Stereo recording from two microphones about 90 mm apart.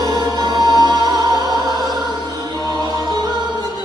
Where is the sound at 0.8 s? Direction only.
45° right (ahead or behind).